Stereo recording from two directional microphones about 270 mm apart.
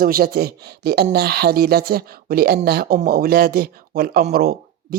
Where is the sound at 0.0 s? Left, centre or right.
Right.